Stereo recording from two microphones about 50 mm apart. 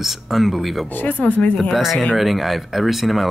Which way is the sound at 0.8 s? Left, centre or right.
Left.